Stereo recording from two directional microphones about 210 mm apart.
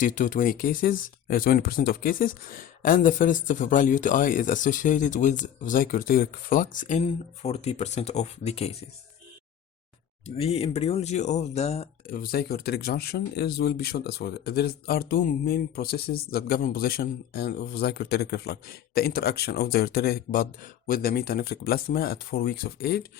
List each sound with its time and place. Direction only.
0.0 s speech: 40° left (ahead or behind)
10.2 s speech: 30° left (ahead or behind)
12.1 s speech: 45° left (ahead or behind)